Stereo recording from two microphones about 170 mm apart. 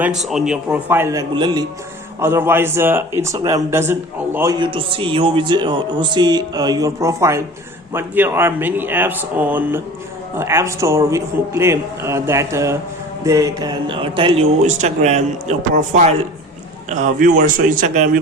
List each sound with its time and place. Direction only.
0.2 s a man's voice: centre (ahead or behind)
1.4 s speech: 25° right (ahead or behind)
2.2 s a man's voice: 15° right (ahead or behind)
4.6 s a man's voice: 30° right (ahead or behind)
14.6 s speech: 45° right (ahead or behind)